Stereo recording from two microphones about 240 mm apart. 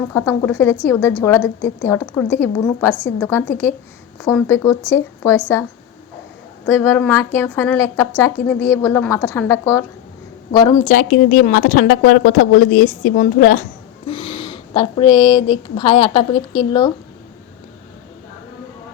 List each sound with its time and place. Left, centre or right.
0.1 s a woman's voice: centre
6.7 s a woman's voice: centre
10.8 s a woman's voice: left
14.1 s speech: left